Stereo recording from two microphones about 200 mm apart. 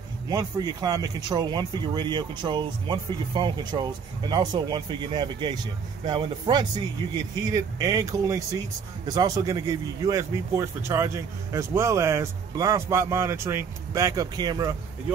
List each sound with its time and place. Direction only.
0.3 s speech: 20° right (ahead or behind)